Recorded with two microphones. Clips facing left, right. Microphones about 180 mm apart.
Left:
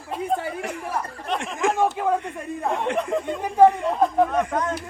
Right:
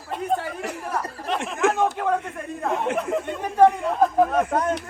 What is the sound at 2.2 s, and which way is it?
Chuckle, centre (ahead or behind).